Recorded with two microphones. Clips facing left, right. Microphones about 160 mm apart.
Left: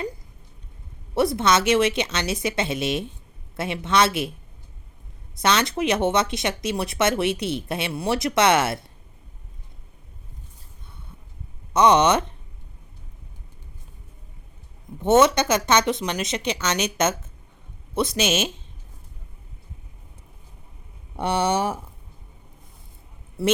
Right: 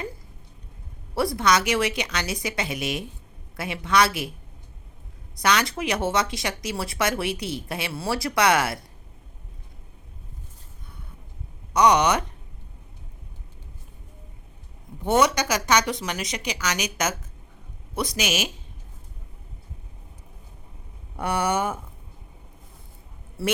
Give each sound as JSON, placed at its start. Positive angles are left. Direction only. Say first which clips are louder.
{"t": 1.1, "sound": "speech", "louder": "left 2 dB", "side_deg": 20}
{"t": 5.4, "sound": "speech", "louder": "left 2 dB", "side_deg": 25}
{"t": 11.7, "sound": "speech", "louder": "left 2 dB", "side_deg": 25}
{"t": 15.0, "sound": "speech", "louder": "left 4 dB", "side_deg": 25}
{"t": 21.2, "sound": "speech", "louder": "left 2 dB", "side_deg": 25}
{"t": 23.4, "sound": "speech", "louder": "left 5 dB", "side_deg": 20}